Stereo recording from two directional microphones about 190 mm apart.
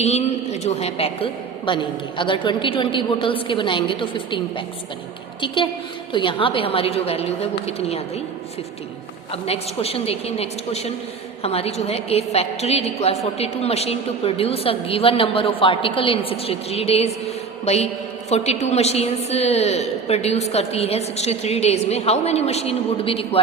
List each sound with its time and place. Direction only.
0.0 s a woman's voice: 35° left (ahead or behind)
6.1 s a woman's voice: 25° left (ahead or behind)
9.3 s a woman's voice: 30° left (ahead or behind)